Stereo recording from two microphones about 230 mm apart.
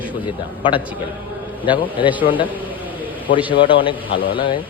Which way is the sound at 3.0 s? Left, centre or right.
Left.